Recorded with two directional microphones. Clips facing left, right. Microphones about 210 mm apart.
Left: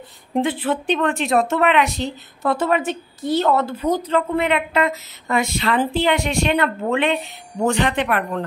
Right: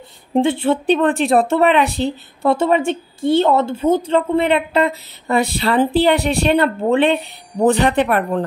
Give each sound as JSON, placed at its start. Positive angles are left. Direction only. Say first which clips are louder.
{"t": 0.3, "sound": "a woman's voice", "louder": "right 5 dB", "side_deg": -25}